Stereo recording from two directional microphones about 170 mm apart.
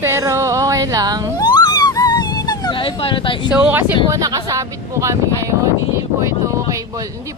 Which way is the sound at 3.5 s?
10° right (ahead or behind).